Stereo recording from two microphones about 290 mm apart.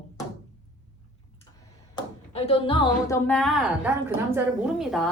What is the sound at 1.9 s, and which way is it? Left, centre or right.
A woman's voice, centre.